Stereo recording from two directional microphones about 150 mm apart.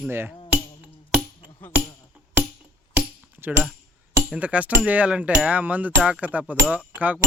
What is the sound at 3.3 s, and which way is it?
Speech, 15° right (ahead or behind).